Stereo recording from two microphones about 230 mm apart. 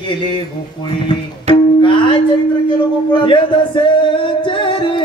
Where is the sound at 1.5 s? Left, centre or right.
Left.